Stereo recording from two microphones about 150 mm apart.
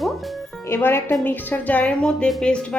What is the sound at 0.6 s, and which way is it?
Speech, 15° left (ahead or behind).